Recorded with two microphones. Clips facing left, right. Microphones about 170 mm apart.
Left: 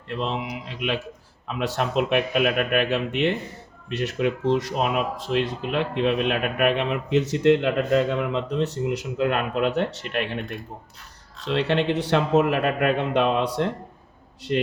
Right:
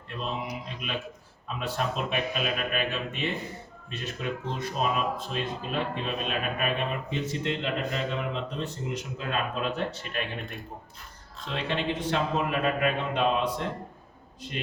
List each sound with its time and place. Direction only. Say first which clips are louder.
0.1 s speech: left 6 dB; 70° left (ahead or behind)
11.4 s speech: left 8 dB; 70° left (ahead or behind)